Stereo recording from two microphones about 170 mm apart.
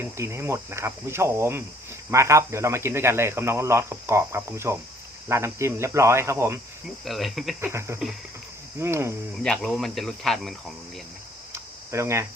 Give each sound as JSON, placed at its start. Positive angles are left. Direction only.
{"t": 0.0, "sound": "speech", "side_deg": -15}
{"t": 7.0, "sound": "speech", "side_deg": 0}
{"t": 7.6, "sound": "speech", "side_deg": -15}
{"t": 9.4, "sound": "speech", "side_deg": 5}
{"t": 11.5, "sound": "a sound", "side_deg": -15}